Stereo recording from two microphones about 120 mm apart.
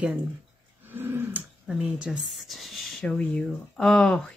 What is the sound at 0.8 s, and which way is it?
Roar, 15° right (ahead or behind).